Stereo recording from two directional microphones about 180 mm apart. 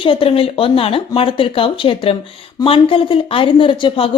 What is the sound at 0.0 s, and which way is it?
Speech, 30° left (ahead or behind).